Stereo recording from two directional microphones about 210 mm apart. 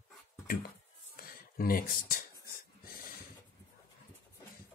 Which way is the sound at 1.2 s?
45° left (ahead or behind).